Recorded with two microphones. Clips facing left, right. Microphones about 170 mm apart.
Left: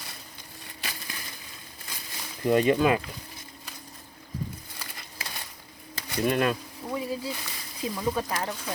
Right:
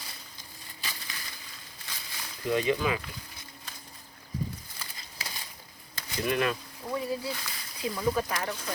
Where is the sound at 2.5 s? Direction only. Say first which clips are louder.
Left 6 dB; 50° left (ahead or behind).